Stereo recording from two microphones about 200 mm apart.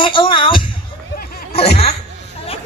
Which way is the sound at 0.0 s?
25° left (ahead or behind).